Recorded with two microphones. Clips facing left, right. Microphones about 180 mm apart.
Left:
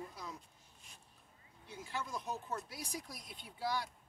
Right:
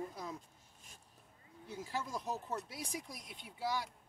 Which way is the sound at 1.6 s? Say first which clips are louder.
Right 2 dB; 40° right (ahead or behind).